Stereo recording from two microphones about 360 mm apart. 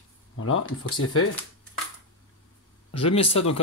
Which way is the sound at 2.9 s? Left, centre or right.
Centre.